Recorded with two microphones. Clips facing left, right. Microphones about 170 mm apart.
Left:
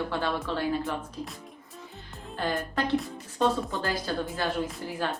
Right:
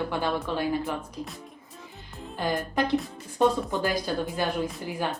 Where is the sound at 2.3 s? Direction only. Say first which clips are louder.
Right 2 dB; 15° right (ahead or behind).